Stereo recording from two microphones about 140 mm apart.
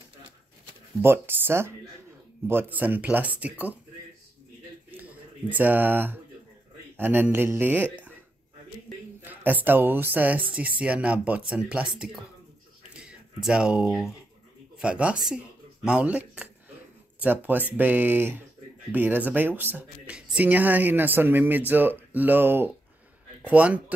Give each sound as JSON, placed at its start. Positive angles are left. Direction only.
{"t": 1.0, "sound": "speech", "side_deg": -15}
{"t": 4.9, "sound": "a sound", "side_deg": -10}
{"t": 7.0, "sound": "speech", "side_deg": -15}
{"t": 9.2, "sound": "speech", "side_deg": -10}